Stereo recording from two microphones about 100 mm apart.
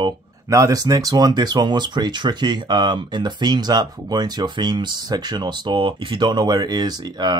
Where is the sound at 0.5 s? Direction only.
35° right (ahead or behind).